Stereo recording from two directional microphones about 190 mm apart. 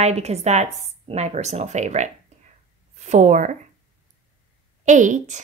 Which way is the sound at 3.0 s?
40° right (ahead or behind).